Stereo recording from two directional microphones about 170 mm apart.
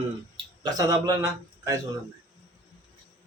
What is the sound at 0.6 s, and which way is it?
A man's voice, 20° right (ahead or behind).